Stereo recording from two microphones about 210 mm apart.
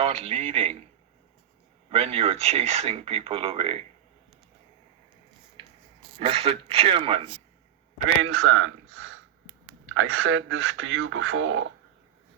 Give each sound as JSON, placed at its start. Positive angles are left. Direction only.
{"t": 0.0, "sound": "speech", "side_deg": -25}
{"t": 1.9, "sound": "speech", "side_deg": -30}
{"t": 6.1, "sound": "speech", "side_deg": -25}
{"t": 8.2, "sound": "speech", "side_deg": -70}